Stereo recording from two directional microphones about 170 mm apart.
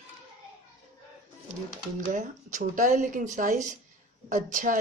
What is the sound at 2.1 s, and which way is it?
Speech, 50° right (ahead or behind).